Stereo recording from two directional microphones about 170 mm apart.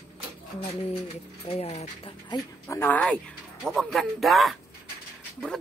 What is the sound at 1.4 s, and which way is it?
Speech, 35° left (ahead or behind).